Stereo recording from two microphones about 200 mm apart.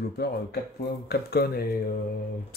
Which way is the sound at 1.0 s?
55° left (ahead or behind).